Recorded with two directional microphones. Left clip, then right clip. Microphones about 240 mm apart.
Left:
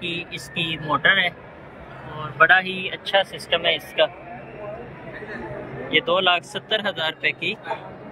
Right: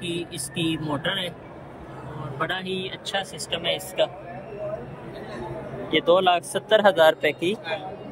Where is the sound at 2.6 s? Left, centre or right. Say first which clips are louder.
Left 3 dB; centre.